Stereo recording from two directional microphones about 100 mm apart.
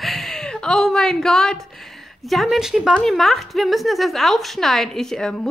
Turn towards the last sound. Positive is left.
turn(degrees=5)  # may be behind; listen again after turning